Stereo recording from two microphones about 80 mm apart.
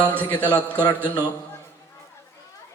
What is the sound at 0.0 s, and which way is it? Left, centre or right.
Speech, right.